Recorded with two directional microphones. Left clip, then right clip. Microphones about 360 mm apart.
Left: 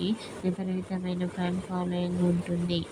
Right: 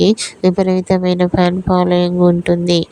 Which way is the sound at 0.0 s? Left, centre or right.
Right.